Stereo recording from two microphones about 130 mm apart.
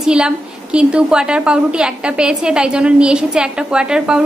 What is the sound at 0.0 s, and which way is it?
A woman's voice, 5° right (ahead or behind).